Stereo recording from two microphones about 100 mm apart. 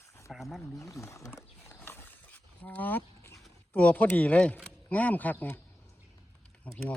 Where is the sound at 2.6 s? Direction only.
15° left (ahead or behind).